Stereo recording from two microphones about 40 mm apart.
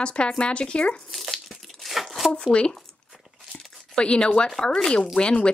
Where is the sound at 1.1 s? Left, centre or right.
Centre.